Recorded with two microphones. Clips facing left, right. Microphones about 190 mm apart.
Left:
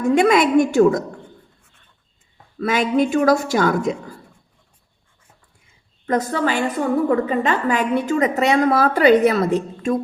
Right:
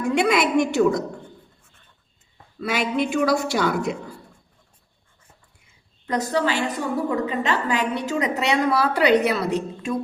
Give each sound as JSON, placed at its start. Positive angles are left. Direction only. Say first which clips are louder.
{"t": 0.1, "sound": "a woman's voice", "louder": "left 5 dB", "side_deg": 45}
{"t": 2.6, "sound": "a woman's voice", "louder": "left 5 dB", "side_deg": 45}
{"t": 6.1, "sound": "a woman's voice", "louder": "left 3 dB", "side_deg": 50}